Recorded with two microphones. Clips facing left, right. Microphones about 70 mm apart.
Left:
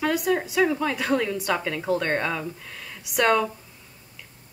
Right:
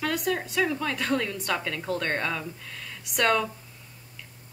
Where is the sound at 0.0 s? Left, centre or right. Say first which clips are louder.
Left 4 dB; centre.